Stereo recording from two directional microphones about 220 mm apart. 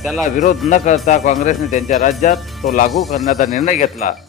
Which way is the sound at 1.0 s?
30° left (ahead or behind).